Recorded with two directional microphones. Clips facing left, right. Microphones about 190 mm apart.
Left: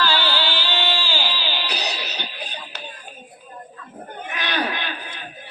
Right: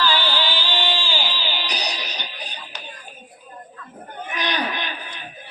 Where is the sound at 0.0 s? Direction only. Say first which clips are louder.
Even; 15° right (ahead or behind).